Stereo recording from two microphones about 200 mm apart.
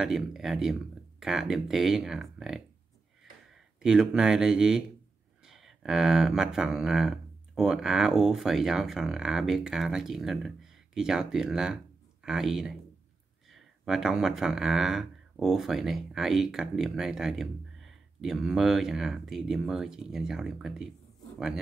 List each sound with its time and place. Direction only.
0.0 s speech: centre (ahead or behind)